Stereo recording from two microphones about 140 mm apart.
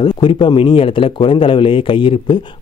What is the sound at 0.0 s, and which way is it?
Speech, 35° left (ahead or behind).